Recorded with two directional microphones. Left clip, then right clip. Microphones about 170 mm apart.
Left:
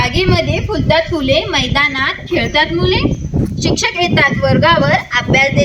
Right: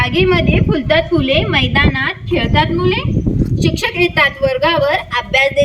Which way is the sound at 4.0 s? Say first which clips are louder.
Right 2 dB; 55° right (ahead or behind).